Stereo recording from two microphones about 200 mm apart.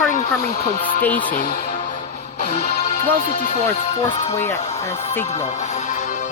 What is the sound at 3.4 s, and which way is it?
Speech, 35° left (ahead or behind).